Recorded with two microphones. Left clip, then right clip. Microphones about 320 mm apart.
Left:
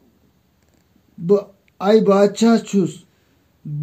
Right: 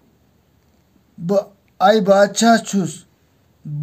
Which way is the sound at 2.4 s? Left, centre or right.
Right.